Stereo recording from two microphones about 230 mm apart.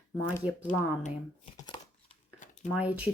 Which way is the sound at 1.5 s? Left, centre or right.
Centre.